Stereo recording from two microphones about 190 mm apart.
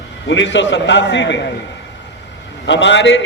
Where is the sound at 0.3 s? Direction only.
70° left (ahead or behind).